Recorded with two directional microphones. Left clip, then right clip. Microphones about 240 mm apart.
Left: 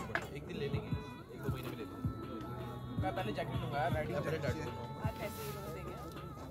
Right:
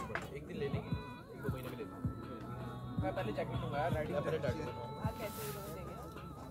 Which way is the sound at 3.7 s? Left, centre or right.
Left.